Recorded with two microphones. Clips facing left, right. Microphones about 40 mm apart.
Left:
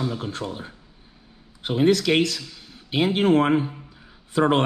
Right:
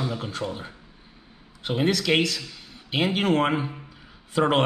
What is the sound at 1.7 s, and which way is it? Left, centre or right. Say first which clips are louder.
Speech: left 3 dB; right.